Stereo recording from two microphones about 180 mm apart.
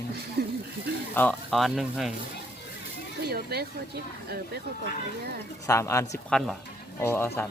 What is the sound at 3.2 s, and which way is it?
Speech, 60° right (ahead or behind).